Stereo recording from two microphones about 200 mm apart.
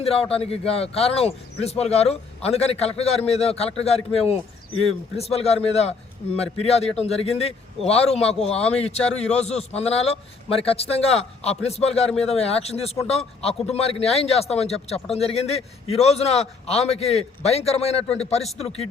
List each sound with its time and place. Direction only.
0.0 s speech: 30° left (ahead or behind)